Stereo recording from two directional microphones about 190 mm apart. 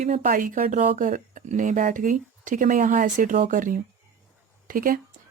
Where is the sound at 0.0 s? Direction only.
40° right (ahead or behind).